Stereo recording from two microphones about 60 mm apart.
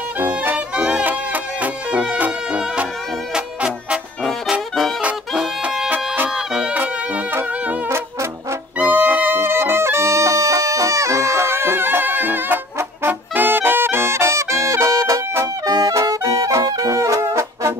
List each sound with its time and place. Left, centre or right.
0.2 s music: right
0.7 s music: centre
1.0 s music: right
1.9 s music: centre
4.5 s brass instrument: centre
5.6 s music: centre
5.9 s music: right
6.3 s music: centre
6.7 s music: right
8.7 s music: right
15.4 s brass instrument: right